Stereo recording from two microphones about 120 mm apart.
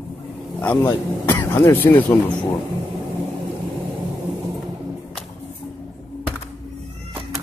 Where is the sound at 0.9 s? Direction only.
20° left (ahead or behind).